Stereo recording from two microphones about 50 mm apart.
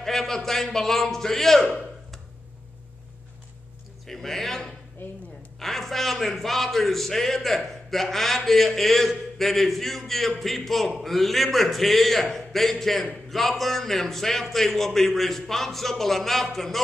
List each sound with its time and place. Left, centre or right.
0.0 s a man's voice: centre
4.1 s a man's voice: centre
5.0 s a woman's voice: left
5.6 s a man's voice: centre